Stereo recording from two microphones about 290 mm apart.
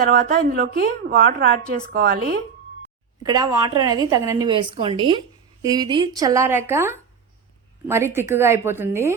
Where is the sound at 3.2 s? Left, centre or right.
Centre.